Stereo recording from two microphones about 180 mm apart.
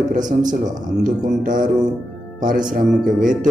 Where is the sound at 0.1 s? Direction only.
45° right (ahead or behind).